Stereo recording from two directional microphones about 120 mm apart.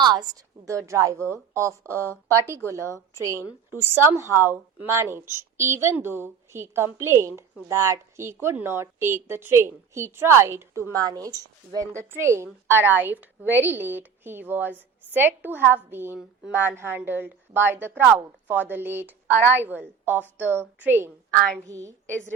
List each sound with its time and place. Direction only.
0.0 s a woman's voice: 35° right (ahead or behind)
3.7 s a woman's voice: 20° right (ahead or behind)
21.7 s a woman's voice: 25° right (ahead or behind)